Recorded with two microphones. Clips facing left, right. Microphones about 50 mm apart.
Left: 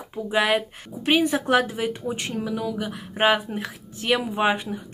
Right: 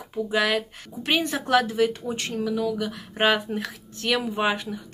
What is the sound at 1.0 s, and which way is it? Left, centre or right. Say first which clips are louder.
A woman's voice: left 4 dB; centre.